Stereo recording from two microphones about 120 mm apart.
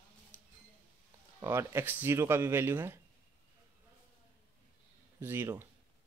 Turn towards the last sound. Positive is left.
turn(degrees=-15)  # may be behind; listen again after turning